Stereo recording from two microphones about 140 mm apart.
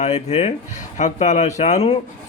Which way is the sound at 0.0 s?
55° left (ahead or behind).